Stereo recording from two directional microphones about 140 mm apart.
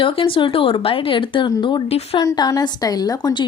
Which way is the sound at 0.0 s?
40° left (ahead or behind).